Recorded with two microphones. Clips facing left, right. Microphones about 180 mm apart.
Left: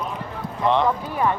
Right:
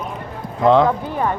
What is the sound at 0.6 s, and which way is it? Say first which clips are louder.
Speech: right 6 dB; 90° right.